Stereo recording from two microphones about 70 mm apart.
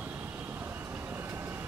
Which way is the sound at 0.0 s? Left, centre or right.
Right.